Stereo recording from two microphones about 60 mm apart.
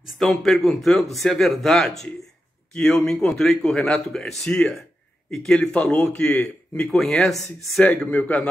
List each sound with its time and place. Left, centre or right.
0.2 s a man's voice: centre
7.8 s a man's voice: left